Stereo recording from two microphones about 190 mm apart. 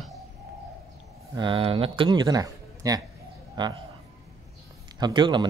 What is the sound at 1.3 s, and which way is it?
Speech, 25° right (ahead or behind).